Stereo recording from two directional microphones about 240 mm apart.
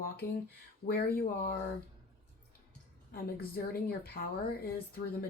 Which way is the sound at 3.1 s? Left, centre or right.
Left.